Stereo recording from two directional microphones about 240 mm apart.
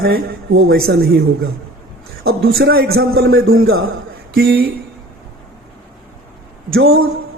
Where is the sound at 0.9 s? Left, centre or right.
Right.